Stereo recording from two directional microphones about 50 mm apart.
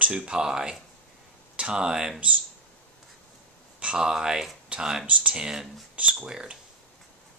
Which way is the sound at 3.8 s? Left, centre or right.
Right.